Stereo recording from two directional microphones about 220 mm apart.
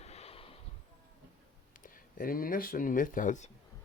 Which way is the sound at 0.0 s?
30° left (ahead or behind).